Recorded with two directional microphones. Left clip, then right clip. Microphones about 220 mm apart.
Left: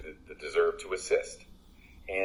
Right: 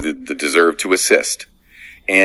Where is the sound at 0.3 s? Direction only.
55° right (ahead or behind).